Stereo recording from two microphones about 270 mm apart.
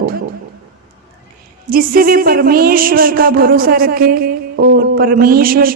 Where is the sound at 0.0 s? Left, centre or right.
Right.